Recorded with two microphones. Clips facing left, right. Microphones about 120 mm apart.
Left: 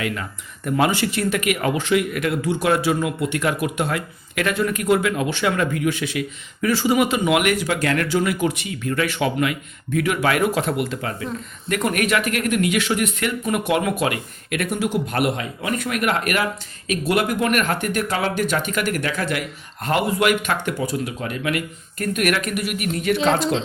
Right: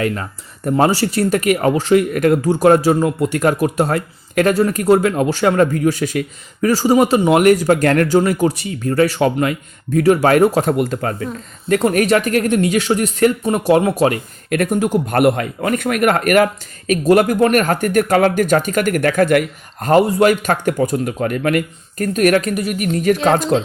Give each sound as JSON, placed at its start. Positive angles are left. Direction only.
{"t": 0.0, "sound": "speech", "side_deg": -40}
{"t": 11.7, "sound": "speech", "side_deg": -35}